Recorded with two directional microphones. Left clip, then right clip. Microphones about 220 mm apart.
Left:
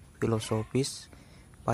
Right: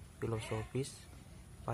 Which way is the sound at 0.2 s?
30° left (ahead or behind).